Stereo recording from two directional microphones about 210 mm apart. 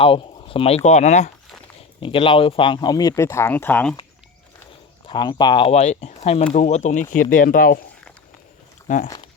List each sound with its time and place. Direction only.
0.0 s speech: 25° left (ahead or behind); by 3.9 s 10° left (ahead or behind)
5.0 s speech: 20° left (ahead or behind); by 7.8 s 40° left (ahead or behind)
9.0 s speech: 20° left (ahead or behind)